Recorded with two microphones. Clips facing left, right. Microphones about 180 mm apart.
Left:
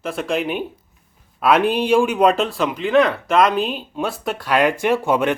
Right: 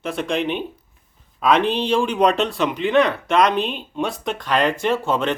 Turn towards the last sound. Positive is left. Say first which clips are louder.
# left 3 dB
turn(degrees=10)  # may be behind; listen again after turning